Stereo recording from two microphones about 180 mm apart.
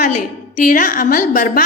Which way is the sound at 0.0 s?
50° left (ahead or behind).